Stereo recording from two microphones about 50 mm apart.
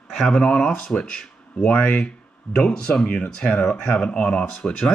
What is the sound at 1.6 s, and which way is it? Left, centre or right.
Speech, left.